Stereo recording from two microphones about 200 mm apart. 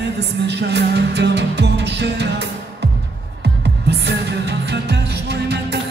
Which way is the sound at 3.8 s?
55° right (ahead or behind).